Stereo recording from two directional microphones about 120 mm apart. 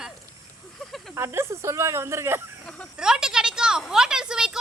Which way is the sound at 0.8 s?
Centre (ahead or behind).